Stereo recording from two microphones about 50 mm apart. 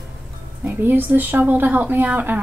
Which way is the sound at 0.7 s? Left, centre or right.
Right.